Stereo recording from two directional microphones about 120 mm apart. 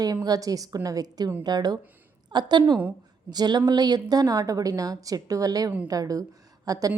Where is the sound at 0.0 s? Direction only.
30° right (ahead or behind).